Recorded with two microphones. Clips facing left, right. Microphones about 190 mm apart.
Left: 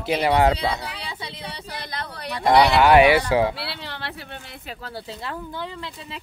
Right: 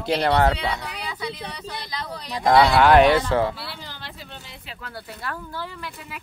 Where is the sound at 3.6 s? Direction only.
70° left (ahead or behind).